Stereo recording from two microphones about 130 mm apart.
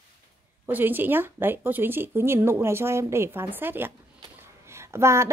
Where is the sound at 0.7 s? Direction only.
15° right (ahead or behind).